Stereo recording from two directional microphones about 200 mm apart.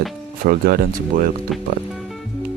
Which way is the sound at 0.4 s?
50° right (ahead or behind).